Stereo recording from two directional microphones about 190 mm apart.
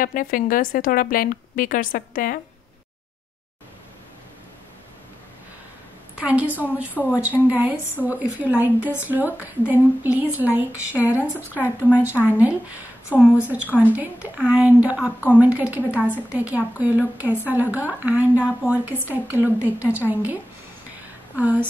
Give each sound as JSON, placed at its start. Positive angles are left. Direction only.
{"t": 0.0, "sound": "a woman's voice", "side_deg": 45}
{"t": 6.1, "sound": "a woman's voice", "side_deg": -10}